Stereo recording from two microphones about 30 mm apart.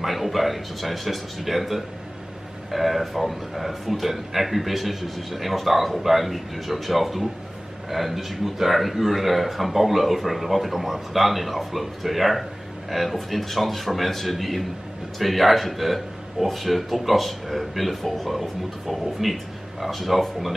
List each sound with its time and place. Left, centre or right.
0.0 s a man's voice: centre